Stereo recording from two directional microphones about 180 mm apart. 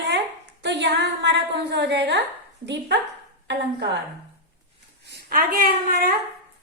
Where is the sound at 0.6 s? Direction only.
75° right (ahead or behind).